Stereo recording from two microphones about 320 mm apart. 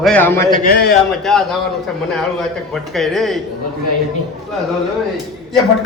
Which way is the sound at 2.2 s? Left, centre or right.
Centre.